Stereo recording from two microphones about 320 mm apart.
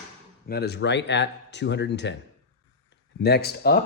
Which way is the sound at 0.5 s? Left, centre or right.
Left.